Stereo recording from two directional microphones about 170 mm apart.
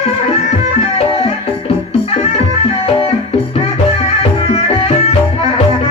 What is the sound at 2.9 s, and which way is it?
Music, 35° left (ahead or behind).